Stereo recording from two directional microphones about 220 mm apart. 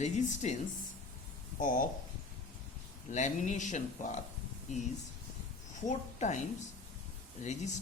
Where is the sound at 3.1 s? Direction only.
35° left (ahead or behind).